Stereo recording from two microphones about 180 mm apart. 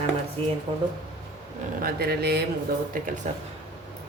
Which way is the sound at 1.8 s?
60° right (ahead or behind).